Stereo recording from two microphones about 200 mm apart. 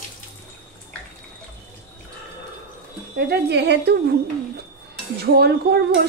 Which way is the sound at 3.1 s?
55° right (ahead or behind).